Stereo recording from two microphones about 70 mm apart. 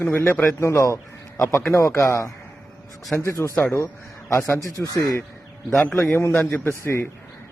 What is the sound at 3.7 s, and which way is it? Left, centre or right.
Speech, left.